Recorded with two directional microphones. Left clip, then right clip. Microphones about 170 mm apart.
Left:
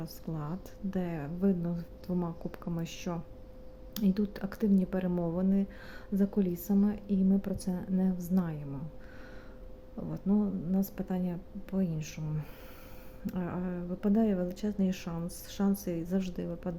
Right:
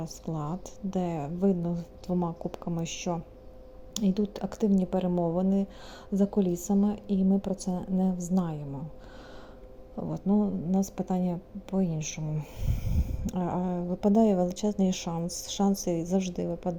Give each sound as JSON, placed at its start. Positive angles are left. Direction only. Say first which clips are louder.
{"t": 0.0, "sound": "a woman's voice", "louder": "right 5 dB", "side_deg": -10}
{"t": 10.0, "sound": "a woman's voice", "louder": "right 4 dB", "side_deg": -15}